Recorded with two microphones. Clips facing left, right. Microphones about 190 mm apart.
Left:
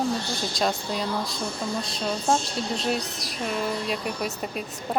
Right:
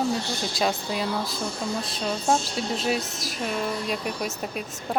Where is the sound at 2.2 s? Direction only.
Centre (ahead or behind).